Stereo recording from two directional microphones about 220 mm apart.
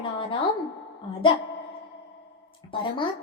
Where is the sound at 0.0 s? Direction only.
25° left (ahead or behind).